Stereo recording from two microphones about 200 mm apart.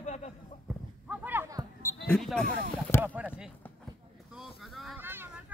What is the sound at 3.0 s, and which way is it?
Speech, 10° right (ahead or behind).